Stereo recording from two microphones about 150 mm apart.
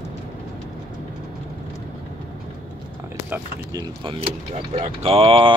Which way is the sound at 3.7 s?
35° right (ahead or behind).